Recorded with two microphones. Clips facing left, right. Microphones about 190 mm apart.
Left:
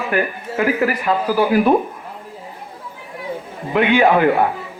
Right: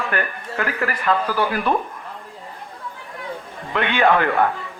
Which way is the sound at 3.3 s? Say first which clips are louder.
Left 6 dB; 15° left (ahead or behind).